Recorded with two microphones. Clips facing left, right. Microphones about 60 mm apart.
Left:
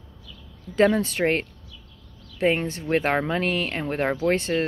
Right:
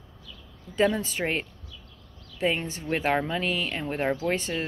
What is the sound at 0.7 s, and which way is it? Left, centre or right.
Speech, left.